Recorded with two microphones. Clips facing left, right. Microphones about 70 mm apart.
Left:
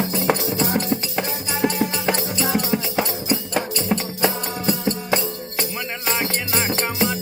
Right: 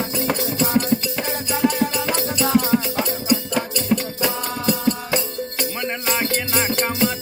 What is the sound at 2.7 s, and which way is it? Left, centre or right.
Music, centre.